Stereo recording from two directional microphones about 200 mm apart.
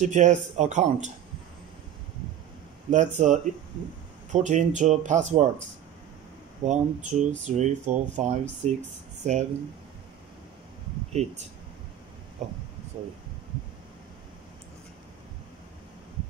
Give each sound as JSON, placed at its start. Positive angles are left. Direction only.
{"t": 0.0, "sound": "speech", "side_deg": -40}
{"t": 2.9, "sound": "speech", "side_deg": -40}
{"t": 6.6, "sound": "speech", "side_deg": -35}
{"t": 11.2, "sound": "speech", "side_deg": -35}
{"t": 12.4, "sound": "speech", "side_deg": -35}